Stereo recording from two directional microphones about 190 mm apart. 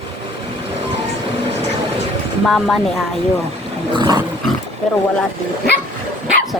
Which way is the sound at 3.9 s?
20° right (ahead or behind).